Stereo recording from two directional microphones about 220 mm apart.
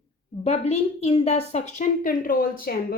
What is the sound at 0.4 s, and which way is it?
A woman's voice, 30° left (ahead or behind).